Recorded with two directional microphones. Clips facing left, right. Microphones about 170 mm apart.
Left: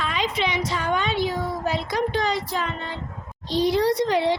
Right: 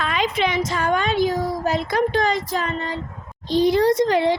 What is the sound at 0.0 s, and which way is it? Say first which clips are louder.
A woman's voice: right 3 dB; 55° right (ahead or behind).